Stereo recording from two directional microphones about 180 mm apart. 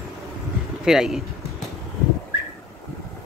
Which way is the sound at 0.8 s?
Centre (ahead or behind).